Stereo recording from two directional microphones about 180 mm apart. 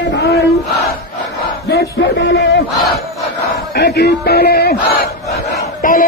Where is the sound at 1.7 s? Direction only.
70° left (ahead or behind).